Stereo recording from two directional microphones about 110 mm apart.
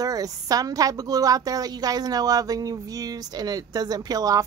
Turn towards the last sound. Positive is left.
turn(degrees=-35)  # may be behind; listen again after turning